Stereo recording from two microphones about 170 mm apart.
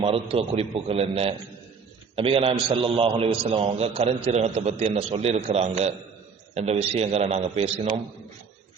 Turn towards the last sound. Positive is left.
turn(degrees=-40)  # may be behind; listen again after turning